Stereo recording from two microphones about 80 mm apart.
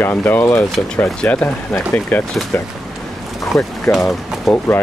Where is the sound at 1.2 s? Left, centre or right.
Centre.